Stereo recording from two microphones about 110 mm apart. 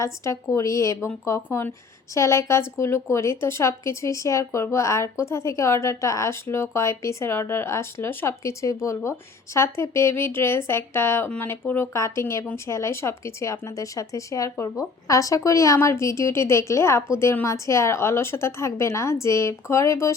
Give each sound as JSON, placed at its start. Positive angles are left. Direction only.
{"t": 0.0, "sound": "a woman's voice", "side_deg": 25}